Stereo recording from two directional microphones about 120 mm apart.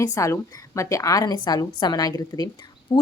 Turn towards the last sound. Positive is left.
turn(degrees=45)  # may be behind; listen again after turning